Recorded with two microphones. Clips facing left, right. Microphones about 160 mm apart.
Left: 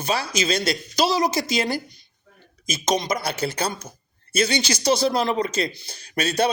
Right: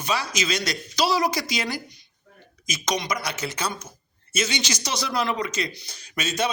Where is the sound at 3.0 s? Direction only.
30° left (ahead or behind).